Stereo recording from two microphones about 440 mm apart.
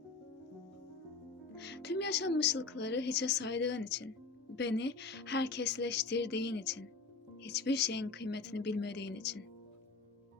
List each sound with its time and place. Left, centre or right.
1.5 s speech: left